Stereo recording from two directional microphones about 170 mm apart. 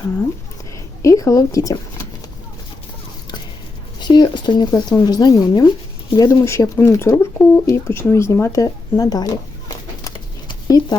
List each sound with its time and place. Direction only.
1.0 s speech: 20° left (ahead or behind)
4.0 s speech: 25° left (ahead or behind)
10.5 s a sound: 25° left (ahead or behind)